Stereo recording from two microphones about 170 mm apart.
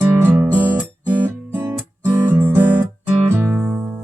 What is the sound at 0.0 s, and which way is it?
Music, 10° right (ahead or behind).